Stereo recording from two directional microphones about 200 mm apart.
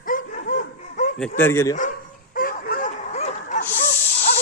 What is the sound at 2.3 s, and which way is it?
Dog, 45° left (ahead or behind).